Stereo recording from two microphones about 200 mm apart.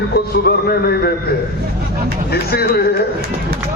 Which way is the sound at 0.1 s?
50° left (ahead or behind).